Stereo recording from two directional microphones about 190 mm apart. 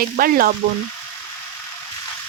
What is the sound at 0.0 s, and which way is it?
Speech, 50° right (ahead or behind).